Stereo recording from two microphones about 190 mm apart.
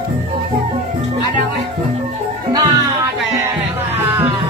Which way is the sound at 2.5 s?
20° right (ahead or behind).